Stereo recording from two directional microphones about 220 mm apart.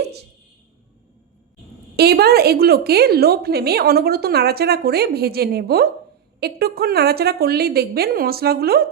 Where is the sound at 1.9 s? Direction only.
45° right (ahead or behind).